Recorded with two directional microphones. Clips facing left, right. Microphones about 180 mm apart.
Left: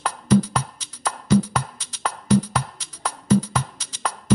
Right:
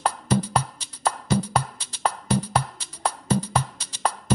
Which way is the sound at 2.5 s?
35° right (ahead or behind).